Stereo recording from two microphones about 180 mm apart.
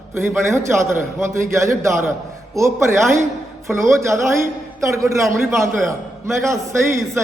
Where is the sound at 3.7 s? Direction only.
15° right (ahead or behind).